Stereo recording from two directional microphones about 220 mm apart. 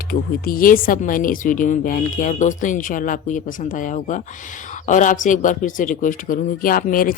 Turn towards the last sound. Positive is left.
turn(degrees=40)  # may be behind; listen again after turning